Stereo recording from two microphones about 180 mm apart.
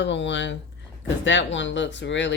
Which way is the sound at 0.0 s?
85° left.